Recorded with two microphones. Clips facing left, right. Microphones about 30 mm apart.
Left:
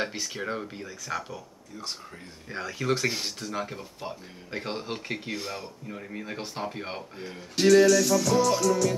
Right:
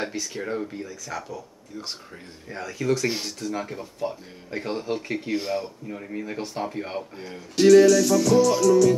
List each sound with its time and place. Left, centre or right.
0.1 s speech: left
0.4 s speech: centre
0.8 s speech: left
2.5 s speech: left
3.5 s speech: centre
5.3 s speech: centre
5.9 s music: centre
6.1 s speech: centre
7.0 s music: centre